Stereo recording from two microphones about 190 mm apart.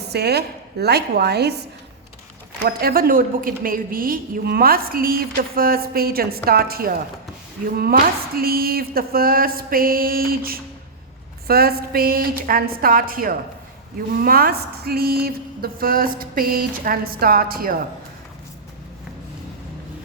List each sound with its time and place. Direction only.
0.1 s speech: 60° right (ahead or behind)
2.6 s a woman's voice: 50° right (ahead or behind)